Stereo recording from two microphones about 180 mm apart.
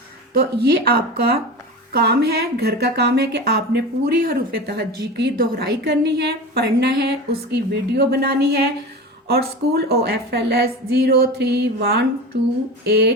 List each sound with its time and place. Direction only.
0.3 s speech: 60° right (ahead or behind)
12.3 s a sound: 70° right (ahead or behind)
12.8 s speech: 65° right (ahead or behind)